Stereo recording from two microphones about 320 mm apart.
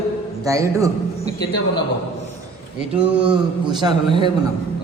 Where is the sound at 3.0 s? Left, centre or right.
Centre.